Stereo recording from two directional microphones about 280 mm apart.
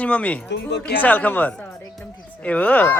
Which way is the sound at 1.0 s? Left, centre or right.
Centre.